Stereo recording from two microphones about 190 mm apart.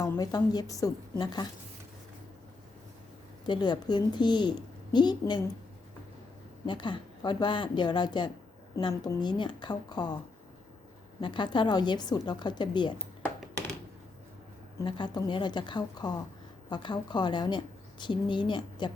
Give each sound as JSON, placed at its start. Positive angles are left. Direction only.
{"t": 0.0, "sound": "a woman's voice", "side_deg": 20}
{"t": 3.4, "sound": "a woman's voice", "side_deg": 25}
{"t": 6.7, "sound": "a woman's voice", "side_deg": 25}
{"t": 11.2, "sound": "a woman's voice", "side_deg": 25}
{"t": 14.8, "sound": "a woman's voice", "side_deg": 25}